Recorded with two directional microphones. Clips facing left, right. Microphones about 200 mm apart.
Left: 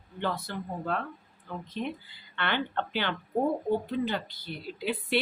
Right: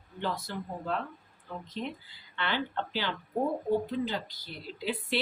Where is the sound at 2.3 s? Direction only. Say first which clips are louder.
Left 2 dB; 60° left (ahead or behind).